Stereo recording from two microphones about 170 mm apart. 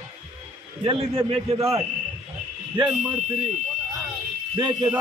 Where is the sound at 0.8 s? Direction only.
30° right (ahead or behind).